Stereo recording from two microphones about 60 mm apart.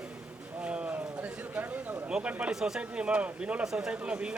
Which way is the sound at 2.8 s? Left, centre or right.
Centre.